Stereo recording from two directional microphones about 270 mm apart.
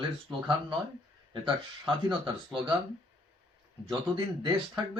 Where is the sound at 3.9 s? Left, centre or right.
Centre.